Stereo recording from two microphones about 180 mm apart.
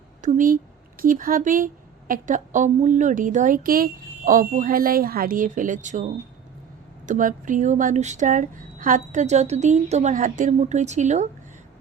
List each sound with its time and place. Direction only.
0.2 s a woman's voice: 45° right (ahead or behind)